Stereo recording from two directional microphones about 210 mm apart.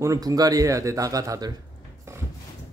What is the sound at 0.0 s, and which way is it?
Speech, 15° right (ahead or behind).